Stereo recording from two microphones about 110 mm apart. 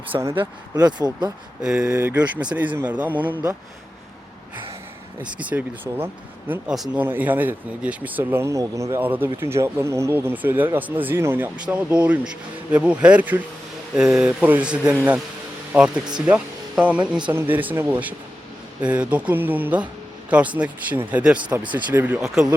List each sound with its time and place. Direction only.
0.1 s speech: 25° right (ahead or behind)
0.8 s speech: 40° right (ahead or behind)
1.6 s speech: 5° right (ahead or behind)
1.9 s speech: 20° right (ahead or behind)
5.2 s speech: 10° right (ahead or behind)
6.7 s speech: 5° right (ahead or behind)
7.0 s speech: 15° right (ahead or behind)